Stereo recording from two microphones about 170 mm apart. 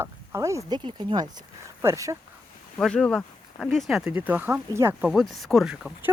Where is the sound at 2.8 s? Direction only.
5° left (ahead or behind); by 5.1 s 15° right (ahead or behind).